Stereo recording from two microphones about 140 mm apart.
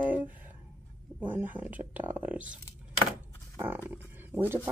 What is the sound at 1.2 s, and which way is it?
Speech, 10° right (ahead or behind).